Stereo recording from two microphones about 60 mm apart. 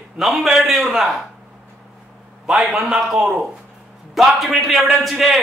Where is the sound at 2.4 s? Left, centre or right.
Centre.